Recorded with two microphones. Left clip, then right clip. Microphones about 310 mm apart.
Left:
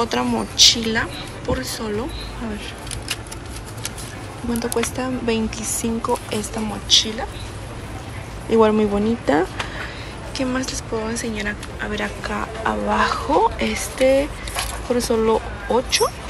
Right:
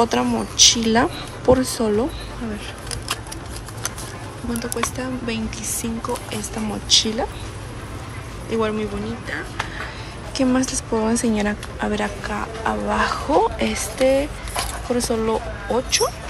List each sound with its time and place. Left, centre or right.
0.0 s a woman's voice: centre
4.6 s a woman's voice: centre
6.9 s a woman's voice: centre
8.5 s a woman's voice: centre
10.3 s a woman's voice: centre